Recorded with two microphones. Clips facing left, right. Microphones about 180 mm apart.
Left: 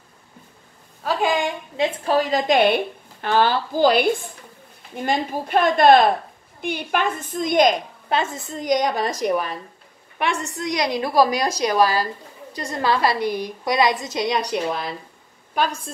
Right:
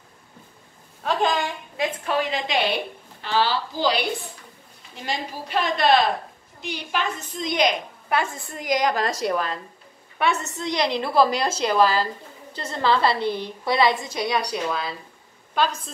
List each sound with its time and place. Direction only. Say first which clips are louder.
1.0 s a woman's voice: left 2 dB; 10° left (ahead or behind)
1.8 s a woman's voice: left 4 dB; 35° left (ahead or behind)
8.1 s a woman's voice: left 2 dB; 20° left (ahead or behind)